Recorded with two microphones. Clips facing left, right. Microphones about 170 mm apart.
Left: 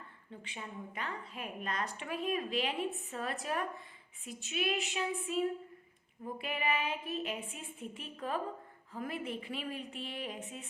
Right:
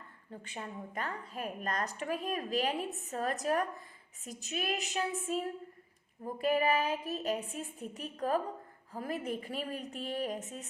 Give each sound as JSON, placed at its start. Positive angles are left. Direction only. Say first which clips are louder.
{"t": 0.3, "sound": "a woman's voice", "louder": "right 3 dB", "side_deg": -45}